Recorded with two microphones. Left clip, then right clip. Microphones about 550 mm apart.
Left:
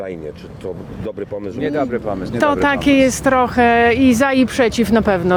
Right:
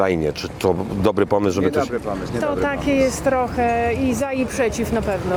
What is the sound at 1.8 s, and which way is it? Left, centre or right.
Speech, left.